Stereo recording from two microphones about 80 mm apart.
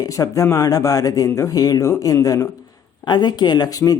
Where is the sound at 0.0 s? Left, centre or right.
Left.